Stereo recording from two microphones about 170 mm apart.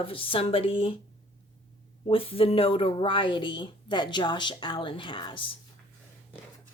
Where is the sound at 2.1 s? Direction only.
35° left (ahead or behind).